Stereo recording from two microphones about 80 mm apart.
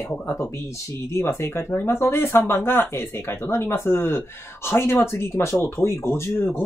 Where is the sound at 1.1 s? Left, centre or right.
Left.